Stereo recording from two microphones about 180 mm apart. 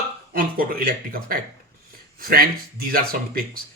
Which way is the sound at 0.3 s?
55° right (ahead or behind).